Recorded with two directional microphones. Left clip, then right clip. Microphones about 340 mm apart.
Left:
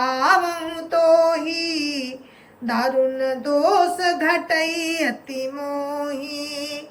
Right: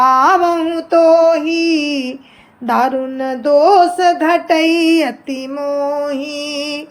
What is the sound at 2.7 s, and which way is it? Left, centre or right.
Female singing, centre.